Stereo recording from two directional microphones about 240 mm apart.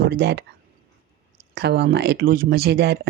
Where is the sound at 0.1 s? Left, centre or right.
Right.